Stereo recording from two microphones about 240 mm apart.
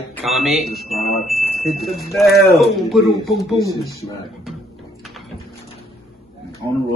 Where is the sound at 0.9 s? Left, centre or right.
Left.